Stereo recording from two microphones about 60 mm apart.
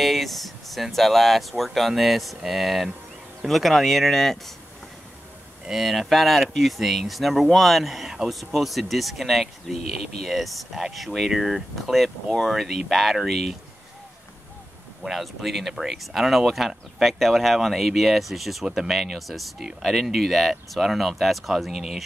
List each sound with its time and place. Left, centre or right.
0.0 s speech: centre
5.7 s speech: centre
15.0 s speech: centre